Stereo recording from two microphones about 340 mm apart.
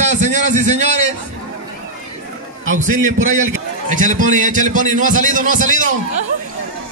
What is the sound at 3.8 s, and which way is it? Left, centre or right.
A man's voice, right.